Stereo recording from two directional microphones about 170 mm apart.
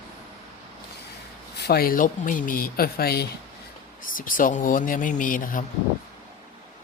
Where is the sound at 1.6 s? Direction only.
70° left (ahead or behind).